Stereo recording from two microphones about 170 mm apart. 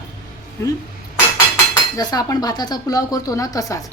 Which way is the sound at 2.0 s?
20° left (ahead or behind).